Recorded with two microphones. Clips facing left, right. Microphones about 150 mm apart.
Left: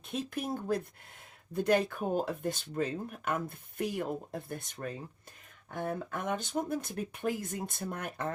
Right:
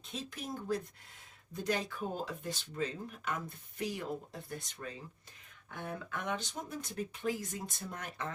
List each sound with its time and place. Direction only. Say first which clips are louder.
0.1 s speech: left 7 dB; 55° left (ahead or behind)